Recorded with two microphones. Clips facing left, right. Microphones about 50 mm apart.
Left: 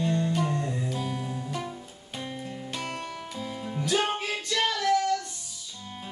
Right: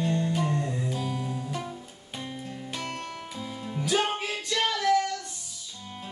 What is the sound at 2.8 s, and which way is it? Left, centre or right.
Music, centre.